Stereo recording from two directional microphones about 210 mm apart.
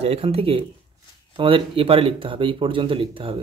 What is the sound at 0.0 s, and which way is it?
Speech, 30° right (ahead or behind).